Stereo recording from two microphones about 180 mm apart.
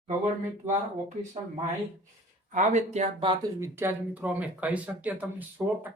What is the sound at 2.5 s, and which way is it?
Speech, 40° right (ahead or behind).